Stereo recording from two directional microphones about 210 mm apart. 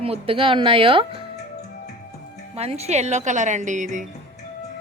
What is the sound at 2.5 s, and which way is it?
A woman's voice, 30° right (ahead or behind).